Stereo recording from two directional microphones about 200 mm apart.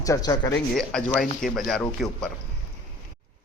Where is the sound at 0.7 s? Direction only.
5° left (ahead or behind).